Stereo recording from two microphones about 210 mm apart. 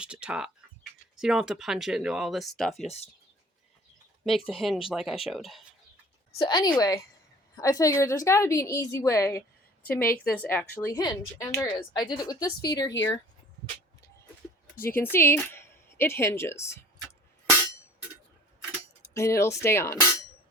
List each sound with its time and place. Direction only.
0.0 s speech: 5° right (ahead or behind)
2.8 s speech: 30° left (ahead or behind)
4.3 s speech: centre (ahead or behind)
6.4 s a woman's voice: 20° left (ahead or behind)
15.0 s speech: 10° left (ahead or behind)
19.1 s a woman's voice: 15° left (ahead or behind)